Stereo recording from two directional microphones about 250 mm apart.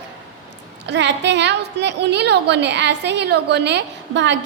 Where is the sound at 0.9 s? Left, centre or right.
Right.